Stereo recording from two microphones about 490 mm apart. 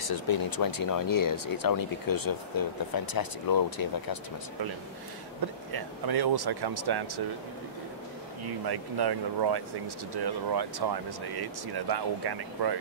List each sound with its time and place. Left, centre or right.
0.0 s speech: left
5.7 s speech: right
8.6 s speech: right